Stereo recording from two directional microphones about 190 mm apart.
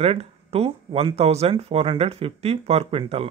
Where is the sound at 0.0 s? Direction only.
30° right (ahead or behind).